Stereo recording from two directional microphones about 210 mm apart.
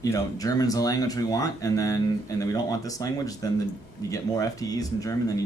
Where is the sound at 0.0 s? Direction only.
15° left (ahead or behind).